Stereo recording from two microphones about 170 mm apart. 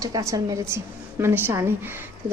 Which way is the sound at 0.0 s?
20° right (ahead or behind).